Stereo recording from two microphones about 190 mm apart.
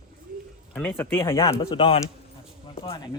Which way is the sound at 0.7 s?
10° left (ahead or behind).